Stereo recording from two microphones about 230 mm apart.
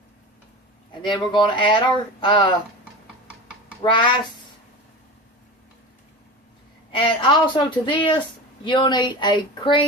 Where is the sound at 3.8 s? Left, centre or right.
Centre.